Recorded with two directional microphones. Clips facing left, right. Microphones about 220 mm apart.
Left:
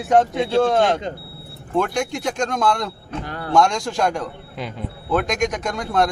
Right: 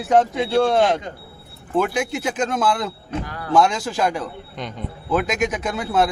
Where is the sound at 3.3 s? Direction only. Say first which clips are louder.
Left 2 dB; 30° left (ahead or behind).